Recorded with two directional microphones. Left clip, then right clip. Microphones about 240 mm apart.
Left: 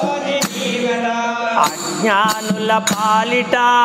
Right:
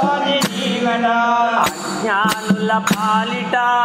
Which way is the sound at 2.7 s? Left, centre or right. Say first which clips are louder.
Left 2 dB; left.